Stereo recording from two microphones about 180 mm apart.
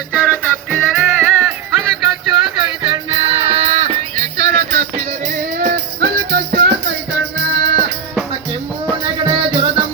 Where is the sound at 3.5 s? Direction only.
35° right (ahead or behind).